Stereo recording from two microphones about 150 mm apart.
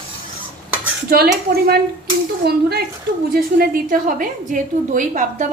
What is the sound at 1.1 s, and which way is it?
A woman's voice, 90° right.